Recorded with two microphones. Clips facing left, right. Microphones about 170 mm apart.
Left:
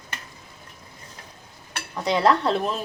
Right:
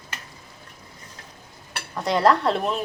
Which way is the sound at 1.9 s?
Centre (ahead or behind).